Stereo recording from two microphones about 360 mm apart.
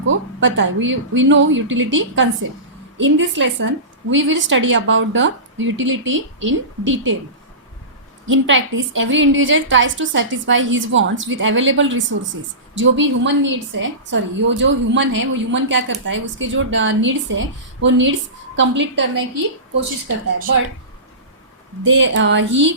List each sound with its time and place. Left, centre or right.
0.0 s a woman's voice: right
8.3 s a woman's voice: right
21.8 s a woman's voice: right